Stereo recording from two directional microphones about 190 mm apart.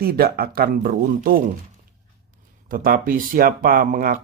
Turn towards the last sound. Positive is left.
turn(degrees=-45)  # may be behind; listen again after turning